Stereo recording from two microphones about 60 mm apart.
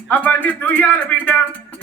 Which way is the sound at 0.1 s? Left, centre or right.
Left.